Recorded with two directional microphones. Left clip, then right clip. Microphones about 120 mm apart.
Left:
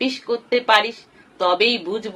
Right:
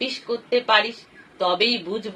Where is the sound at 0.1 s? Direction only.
55° left (ahead or behind).